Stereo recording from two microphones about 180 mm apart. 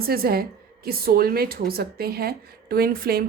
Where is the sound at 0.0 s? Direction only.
55° right (ahead or behind).